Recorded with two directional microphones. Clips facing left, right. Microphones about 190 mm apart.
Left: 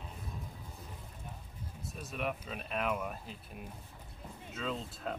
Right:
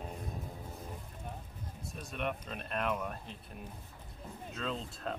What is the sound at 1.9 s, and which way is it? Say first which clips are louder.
Speech: even; 5° left (ahead or behind).